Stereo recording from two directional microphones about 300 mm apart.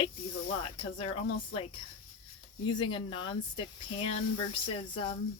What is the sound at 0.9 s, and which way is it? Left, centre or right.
Speech, centre.